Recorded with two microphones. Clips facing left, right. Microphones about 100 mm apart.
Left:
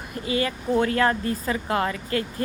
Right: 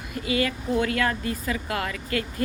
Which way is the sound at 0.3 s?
30° left (ahead or behind).